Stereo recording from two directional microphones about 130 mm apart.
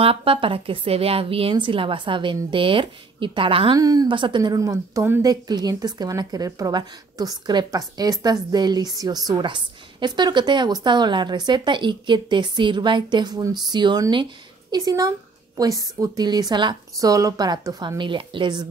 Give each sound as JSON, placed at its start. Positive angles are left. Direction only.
{"t": 0.0, "sound": "speech", "side_deg": -45}
{"t": 3.7, "sound": "a woman's voice", "side_deg": -30}